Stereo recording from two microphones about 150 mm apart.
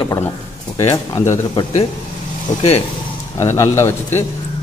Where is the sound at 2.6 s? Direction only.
40° left (ahead or behind).